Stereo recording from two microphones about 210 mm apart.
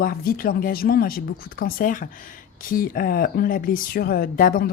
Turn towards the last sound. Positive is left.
turn(degrees=40)  # may be behind; listen again after turning